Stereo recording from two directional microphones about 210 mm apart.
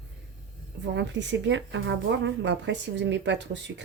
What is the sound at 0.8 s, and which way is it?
Speech, 60° right (ahead or behind).